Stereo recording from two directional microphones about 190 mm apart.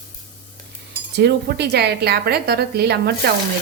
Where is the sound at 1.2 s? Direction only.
60° right (ahead or behind).